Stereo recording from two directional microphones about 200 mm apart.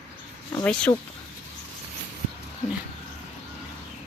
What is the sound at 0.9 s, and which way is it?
Speech, 20° left (ahead or behind).